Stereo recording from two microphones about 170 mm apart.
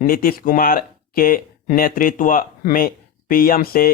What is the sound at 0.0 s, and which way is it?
Speech, 60° left (ahead or behind).